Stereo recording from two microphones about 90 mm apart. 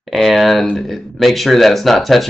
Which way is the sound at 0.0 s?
Centre (ahead or behind).